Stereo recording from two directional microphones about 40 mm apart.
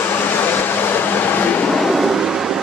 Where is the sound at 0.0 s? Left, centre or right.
Left.